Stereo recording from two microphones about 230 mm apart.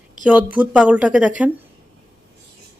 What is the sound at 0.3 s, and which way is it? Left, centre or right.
Speech, centre.